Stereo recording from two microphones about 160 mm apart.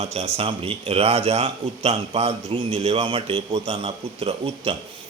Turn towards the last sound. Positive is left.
turn(degrees=-35)  # may be behind; listen again after turning